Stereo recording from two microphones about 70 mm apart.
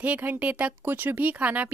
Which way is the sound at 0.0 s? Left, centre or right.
Right.